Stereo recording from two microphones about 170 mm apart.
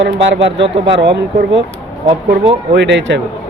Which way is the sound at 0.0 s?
90° right.